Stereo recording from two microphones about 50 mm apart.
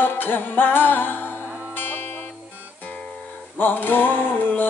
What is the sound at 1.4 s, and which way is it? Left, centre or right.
Music, right.